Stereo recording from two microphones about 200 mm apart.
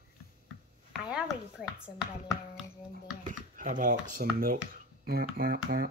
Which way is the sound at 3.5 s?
40° right (ahead or behind).